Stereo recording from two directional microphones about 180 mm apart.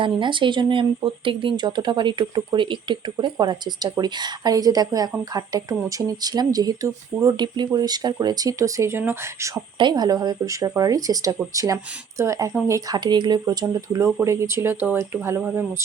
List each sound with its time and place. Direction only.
0.0 s speech: 25° right (ahead or behind); by 15.6 s 10° right (ahead or behind)